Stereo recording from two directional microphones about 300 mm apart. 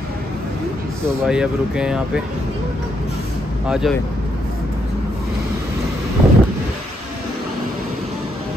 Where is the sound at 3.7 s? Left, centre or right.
Centre.